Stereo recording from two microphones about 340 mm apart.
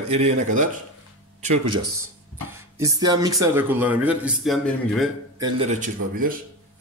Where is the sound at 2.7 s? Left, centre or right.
Centre.